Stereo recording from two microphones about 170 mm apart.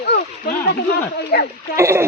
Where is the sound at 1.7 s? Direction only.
15° right (ahead or behind).